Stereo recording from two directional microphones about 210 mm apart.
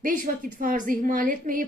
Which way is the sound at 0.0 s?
40° right (ahead or behind).